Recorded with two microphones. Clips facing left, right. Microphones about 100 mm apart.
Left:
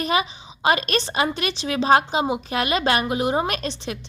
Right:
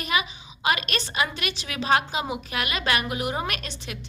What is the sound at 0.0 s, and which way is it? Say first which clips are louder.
A woman's voice: left 5 dB; 35° left (ahead or behind).